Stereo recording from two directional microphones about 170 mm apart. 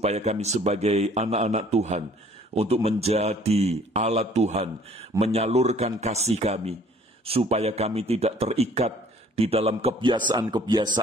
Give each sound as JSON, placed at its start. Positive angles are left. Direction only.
{"t": 0.0, "sound": "a man's voice", "side_deg": -40}